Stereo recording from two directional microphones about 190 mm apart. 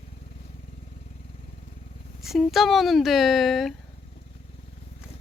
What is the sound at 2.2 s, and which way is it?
Speech, centre (ahead or behind).